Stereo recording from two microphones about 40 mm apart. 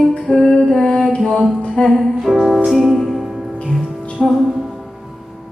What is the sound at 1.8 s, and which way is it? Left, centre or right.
Music, left.